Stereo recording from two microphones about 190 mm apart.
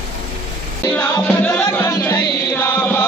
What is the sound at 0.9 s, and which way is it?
Music, 10° left (ahead or behind).